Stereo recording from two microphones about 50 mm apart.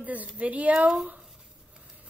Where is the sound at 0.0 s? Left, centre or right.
Right.